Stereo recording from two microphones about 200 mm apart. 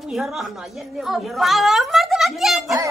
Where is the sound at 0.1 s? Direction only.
Centre (ahead or behind).